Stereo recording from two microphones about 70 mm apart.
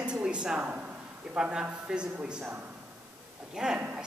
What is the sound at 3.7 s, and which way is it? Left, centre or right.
Speech, right.